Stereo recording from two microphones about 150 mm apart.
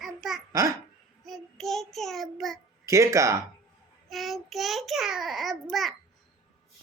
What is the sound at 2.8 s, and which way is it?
Speech, 20° right (ahead or behind).